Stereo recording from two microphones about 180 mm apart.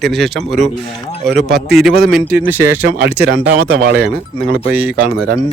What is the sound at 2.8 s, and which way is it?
Speech, 60° right (ahead or behind).